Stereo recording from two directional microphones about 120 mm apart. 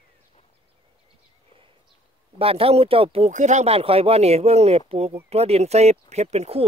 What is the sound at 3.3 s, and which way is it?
Speech, 80° right.